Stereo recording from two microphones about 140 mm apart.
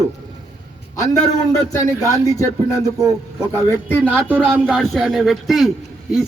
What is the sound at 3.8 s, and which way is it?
Speech, 15° left (ahead or behind).